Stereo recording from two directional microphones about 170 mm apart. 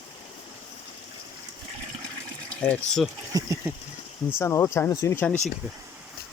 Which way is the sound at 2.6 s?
10° left (ahead or behind).